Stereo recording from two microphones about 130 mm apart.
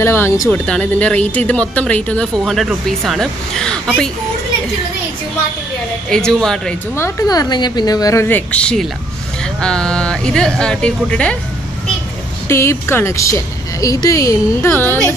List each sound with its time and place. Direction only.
0.0 s speech: 20° left (ahead or behind)
0.5 s speech: 10° left (ahead or behind)
2.4 s speech: centre (ahead or behind)
6.0 s speech: 5° left (ahead or behind)
7.0 s speech: 30° left (ahead or behind); by 11.3 s 10° left (ahead or behind)
12.4 s speech: 20° left (ahead or behind)